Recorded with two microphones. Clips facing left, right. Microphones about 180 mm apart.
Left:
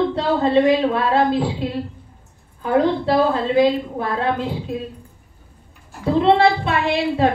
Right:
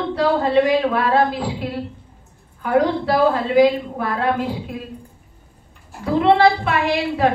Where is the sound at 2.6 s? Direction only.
25° left (ahead or behind).